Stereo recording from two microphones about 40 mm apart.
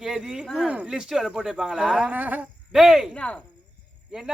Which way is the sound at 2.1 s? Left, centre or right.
Right.